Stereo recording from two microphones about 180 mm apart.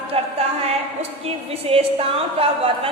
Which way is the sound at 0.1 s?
35° right (ahead or behind).